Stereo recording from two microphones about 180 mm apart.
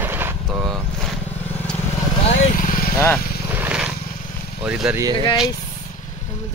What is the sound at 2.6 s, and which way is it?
Vehicle, 50° left (ahead or behind).